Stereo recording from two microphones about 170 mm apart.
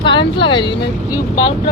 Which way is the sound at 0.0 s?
30° left (ahead or behind).